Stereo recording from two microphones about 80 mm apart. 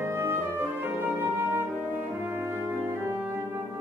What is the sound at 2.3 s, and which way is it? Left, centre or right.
Brass instrument, right.